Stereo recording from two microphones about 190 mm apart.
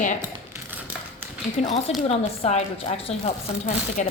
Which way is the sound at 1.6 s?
35° left (ahead or behind).